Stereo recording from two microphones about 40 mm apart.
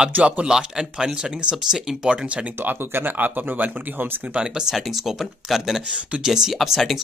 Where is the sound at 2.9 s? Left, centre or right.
Right.